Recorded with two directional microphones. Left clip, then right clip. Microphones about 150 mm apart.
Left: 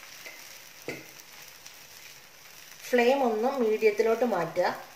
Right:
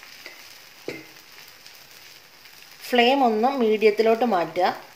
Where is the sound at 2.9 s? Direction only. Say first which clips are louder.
Right 5 dB; 50° right (ahead or behind).